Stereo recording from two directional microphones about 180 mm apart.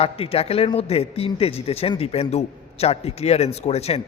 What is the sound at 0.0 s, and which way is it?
A man's voice, 35° left (ahead or behind).